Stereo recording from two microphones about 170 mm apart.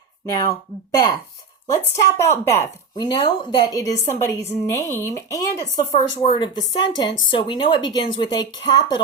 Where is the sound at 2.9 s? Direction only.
25° left (ahead or behind).